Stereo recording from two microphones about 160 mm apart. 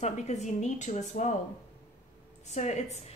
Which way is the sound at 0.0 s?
45° left (ahead or behind).